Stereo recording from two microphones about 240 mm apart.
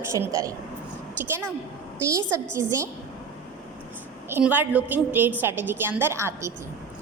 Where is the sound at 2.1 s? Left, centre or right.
Centre.